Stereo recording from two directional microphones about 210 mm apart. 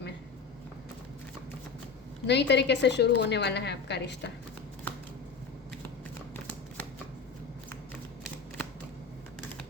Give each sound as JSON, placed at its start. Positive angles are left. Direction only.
{"t": 2.2, "sound": "a woman's voice", "side_deg": 55}